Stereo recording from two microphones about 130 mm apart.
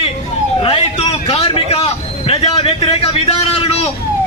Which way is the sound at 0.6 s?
45° left (ahead or behind).